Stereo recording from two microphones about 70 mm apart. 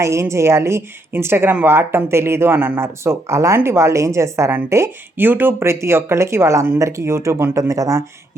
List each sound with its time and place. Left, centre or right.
0.0 s speech: right